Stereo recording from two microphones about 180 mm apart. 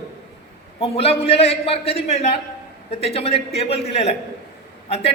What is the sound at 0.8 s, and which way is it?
A woman's voice, 35° left (ahead or behind).